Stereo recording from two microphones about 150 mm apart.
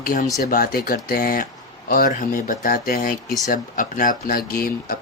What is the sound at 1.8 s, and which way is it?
Speech, 65° left (ahead or behind).